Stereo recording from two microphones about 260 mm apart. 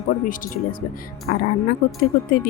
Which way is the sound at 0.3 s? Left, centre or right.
Left.